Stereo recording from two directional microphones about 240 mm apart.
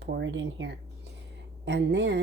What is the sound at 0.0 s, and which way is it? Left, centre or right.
Speech, right.